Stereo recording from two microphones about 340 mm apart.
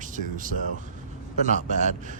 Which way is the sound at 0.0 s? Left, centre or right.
Right.